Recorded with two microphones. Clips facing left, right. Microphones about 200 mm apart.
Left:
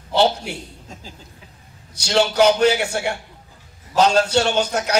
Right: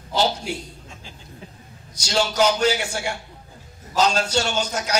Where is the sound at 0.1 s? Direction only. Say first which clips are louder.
Left 4 dB; 65° left (ahead or behind).